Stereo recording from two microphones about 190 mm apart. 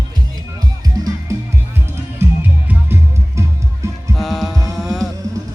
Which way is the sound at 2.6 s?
10° right (ahead or behind).